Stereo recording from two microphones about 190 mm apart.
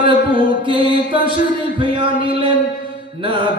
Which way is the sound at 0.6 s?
25° right (ahead or behind).